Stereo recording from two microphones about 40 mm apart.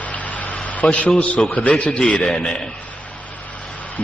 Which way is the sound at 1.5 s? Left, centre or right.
Left.